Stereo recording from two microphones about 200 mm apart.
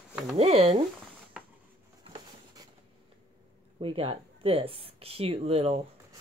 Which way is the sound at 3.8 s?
25° right (ahead or behind).